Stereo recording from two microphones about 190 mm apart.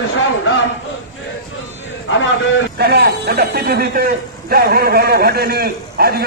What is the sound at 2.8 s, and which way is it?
Speech, 55° right (ahead or behind).